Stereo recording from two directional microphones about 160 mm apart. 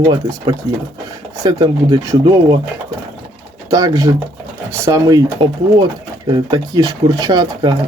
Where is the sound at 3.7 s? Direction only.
20° right (ahead or behind).